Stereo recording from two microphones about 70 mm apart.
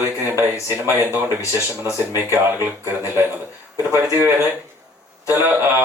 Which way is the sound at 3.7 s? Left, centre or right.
Left.